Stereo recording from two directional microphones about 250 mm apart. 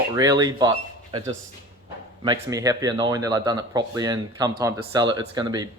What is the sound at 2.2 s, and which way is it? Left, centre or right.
Speech, centre.